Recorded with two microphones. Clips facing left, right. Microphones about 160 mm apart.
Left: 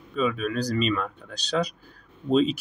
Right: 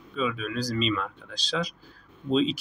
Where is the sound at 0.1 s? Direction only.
50° left (ahead or behind).